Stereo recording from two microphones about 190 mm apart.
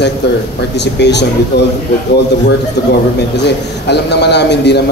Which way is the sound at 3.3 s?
60° left (ahead or behind).